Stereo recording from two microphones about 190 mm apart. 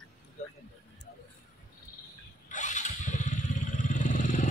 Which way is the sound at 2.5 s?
40° left (ahead or behind).